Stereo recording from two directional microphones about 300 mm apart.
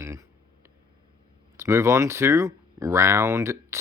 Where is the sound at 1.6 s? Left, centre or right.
Centre.